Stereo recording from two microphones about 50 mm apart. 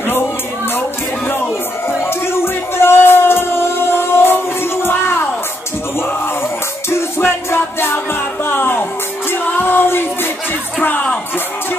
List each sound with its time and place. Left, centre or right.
2.0 s music: left
4.8 s a sound: left
7.2 s music: left